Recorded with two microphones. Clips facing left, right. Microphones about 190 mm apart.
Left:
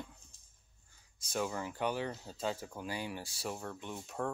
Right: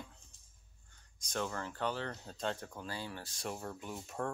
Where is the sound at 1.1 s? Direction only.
5° left (ahead or behind).